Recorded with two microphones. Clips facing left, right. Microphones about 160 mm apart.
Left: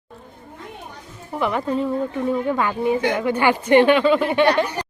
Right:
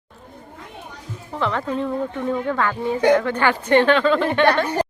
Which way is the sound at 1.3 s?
15° left (ahead or behind).